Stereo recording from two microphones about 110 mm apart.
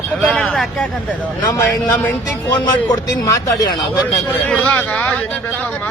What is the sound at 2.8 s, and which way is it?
Speech, 35° left (ahead or behind).